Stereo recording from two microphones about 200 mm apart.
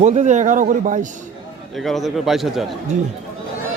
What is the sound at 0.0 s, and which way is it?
A man's voice, 35° right (ahead or behind).